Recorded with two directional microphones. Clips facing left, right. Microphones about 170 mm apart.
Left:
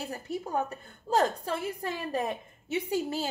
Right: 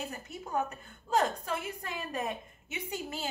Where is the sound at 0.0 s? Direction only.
35° left (ahead or behind).